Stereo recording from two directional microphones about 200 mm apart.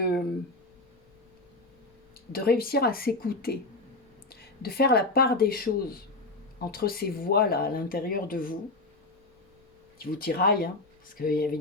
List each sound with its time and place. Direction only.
2.3 s speech: 50° left (ahead or behind)
10.1 s speech: 50° left (ahead or behind)